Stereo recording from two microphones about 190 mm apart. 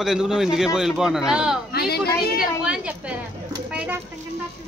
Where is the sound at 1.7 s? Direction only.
55° left (ahead or behind).